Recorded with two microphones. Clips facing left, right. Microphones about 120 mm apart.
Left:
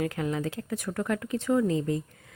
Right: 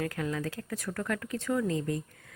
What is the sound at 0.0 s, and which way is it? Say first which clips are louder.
Speech: left 3 dB; 20° left (ahead or behind).